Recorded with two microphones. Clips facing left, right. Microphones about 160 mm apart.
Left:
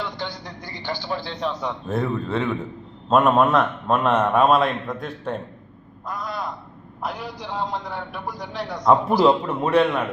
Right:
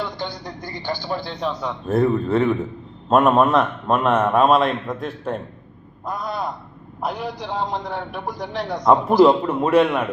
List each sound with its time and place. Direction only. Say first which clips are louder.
0.4 s a woman's voice: right 3 dB; 45° right (ahead or behind)
1.3 s a man's voice: right 1 dB; 5° right (ahead or behind)
6.1 s a man's voice: right 3 dB; 25° right (ahead or behind)
8.8 s a man's voice: right 3 dB; centre (ahead or behind)